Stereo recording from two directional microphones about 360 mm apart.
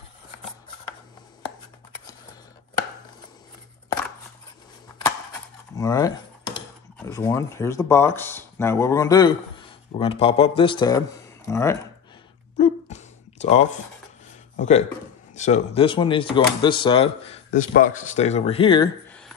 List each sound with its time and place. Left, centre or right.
5.8 s speech: centre
12.5 s a sound: centre
14.6 s speech: centre